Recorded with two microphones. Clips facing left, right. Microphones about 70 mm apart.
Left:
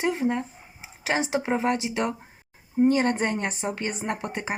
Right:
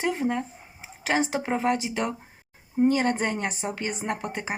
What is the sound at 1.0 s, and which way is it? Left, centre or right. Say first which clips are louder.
Speech: right 1 dB; right.